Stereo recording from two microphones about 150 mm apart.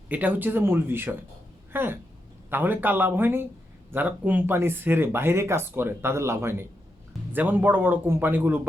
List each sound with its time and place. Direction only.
0.1 s speech: 10° right (ahead or behind)